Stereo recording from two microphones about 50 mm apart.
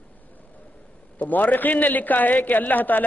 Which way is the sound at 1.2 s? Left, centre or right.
Left.